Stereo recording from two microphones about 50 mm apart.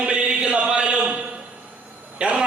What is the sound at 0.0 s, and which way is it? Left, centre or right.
Chant, centre.